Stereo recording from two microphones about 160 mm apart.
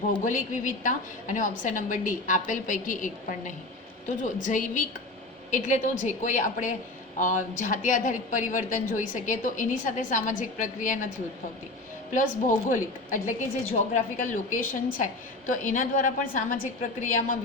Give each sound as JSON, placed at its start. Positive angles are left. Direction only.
{"t": 0.1, "sound": "a woman's voice", "side_deg": 55}
{"t": 12.1, "sound": "a woman's voice", "side_deg": 55}